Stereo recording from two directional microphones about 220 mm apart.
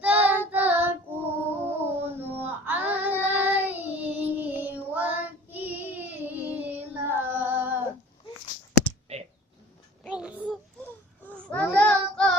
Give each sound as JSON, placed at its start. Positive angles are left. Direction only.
{"t": 0.0, "sound": "child singing", "side_deg": -5}
{"t": 1.6, "sound": "howl", "side_deg": -10}
{"t": 2.4, "sound": "child singing", "side_deg": -10}
{"t": 8.8, "sound": "a sound", "side_deg": -30}
{"t": 10.0, "sound": "a sound", "side_deg": -5}
{"t": 11.3, "sound": "babbling", "side_deg": 5}
{"t": 11.8, "sound": "child singing", "side_deg": 5}